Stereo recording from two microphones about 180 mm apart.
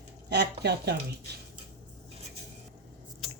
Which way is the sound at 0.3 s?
65° right (ahead or behind).